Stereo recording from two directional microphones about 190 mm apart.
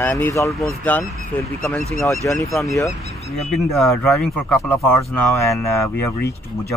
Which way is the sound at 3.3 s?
Centre (ahead or behind).